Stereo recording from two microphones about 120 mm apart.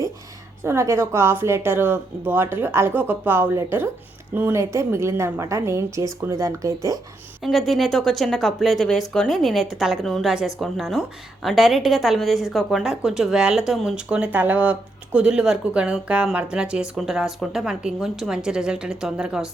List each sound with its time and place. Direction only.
0.6 s a woman's voice: 20° right (ahead or behind)
7.4 s a woman's voice: centre (ahead or behind)